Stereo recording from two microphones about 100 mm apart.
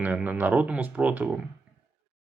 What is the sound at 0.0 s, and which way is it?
Speech, 15° right (ahead or behind).